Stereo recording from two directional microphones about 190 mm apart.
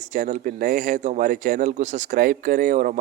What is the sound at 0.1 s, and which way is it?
Speech, 45° right (ahead or behind).